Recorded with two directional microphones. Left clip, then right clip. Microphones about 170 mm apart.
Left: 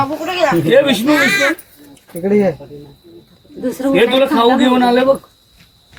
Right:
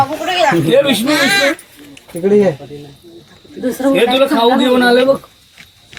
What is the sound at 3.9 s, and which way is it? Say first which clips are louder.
Speech: even; 5° left (ahead or behind).